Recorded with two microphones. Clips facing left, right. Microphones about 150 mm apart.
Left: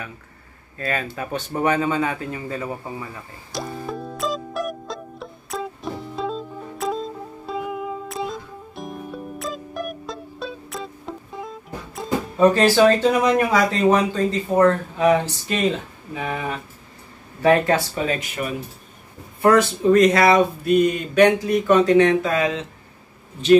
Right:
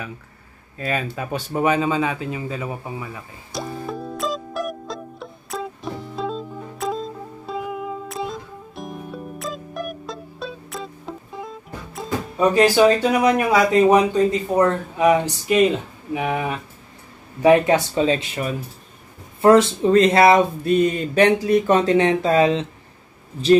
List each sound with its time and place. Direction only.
0.7 s speech: 15° right (ahead or behind)
3.5 s music: centre (ahead or behind)
12.5 s speech: 10° right (ahead or behind); by 22.7 s 30° right (ahead or behind)